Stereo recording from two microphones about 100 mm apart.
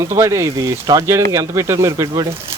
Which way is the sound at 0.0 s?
30° right (ahead or behind).